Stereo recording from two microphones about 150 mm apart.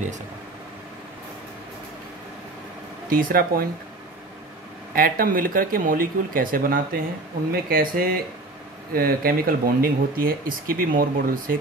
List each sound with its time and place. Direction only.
3.1 s speech: 70° right (ahead or behind)
4.9 s speech: 70° right (ahead or behind)